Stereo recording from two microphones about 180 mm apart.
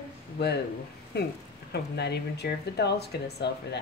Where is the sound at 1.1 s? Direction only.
65° left (ahead or behind).